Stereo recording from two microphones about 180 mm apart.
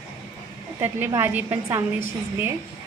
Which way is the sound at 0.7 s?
15° right (ahead or behind).